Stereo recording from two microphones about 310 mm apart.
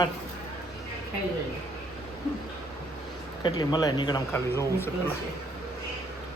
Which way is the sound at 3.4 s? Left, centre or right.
Centre.